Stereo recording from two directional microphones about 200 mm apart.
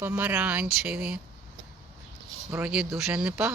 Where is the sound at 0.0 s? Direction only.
10° right (ahead or behind).